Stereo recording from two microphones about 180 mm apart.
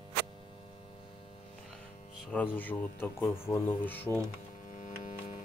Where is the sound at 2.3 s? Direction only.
10° left (ahead or behind).